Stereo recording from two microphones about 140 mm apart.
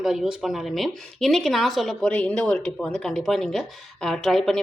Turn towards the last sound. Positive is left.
turn(degrees=0)  # may be behind; listen again after turning